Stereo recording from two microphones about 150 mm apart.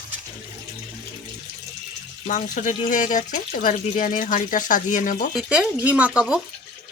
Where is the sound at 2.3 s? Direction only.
60° left (ahead or behind).